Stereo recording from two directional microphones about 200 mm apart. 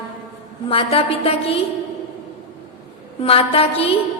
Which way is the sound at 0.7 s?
30° left (ahead or behind).